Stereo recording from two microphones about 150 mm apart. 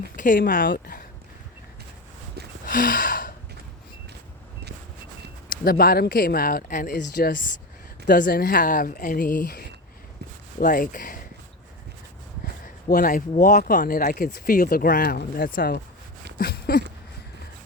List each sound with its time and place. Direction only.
0.2 s speech: 70° left (ahead or behind)
2.6 s gasp: 65° left (ahead or behind)
5.5 s speech: 80° left
10.6 s speech: 65° left (ahead or behind)
12.6 s speech: 70° left (ahead or behind)
16.4 s a sound: 90° left